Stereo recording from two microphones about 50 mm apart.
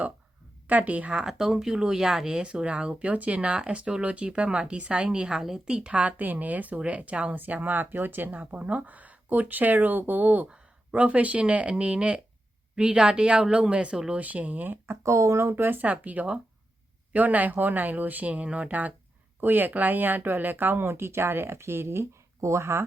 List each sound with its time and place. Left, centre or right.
0.7 s speech: right
1.1 s speech: centre
2.4 s speech: right
5.9 s speech: right
14.2 s speech: right
15.0 s speech: right
20.8 s speech: right
22.4 s speech: right